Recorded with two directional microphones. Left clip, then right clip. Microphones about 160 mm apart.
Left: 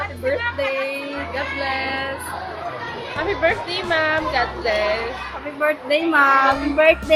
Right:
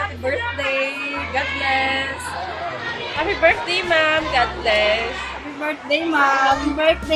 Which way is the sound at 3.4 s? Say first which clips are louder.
Right 5 dB; 15° left (ahead or behind).